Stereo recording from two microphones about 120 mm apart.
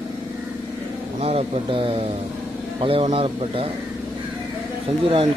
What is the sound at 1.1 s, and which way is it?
Speech, 55° right (ahead or behind).